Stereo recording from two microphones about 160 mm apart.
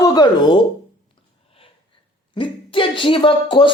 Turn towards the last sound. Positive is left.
turn(degrees=30)  # may be behind; listen again after turning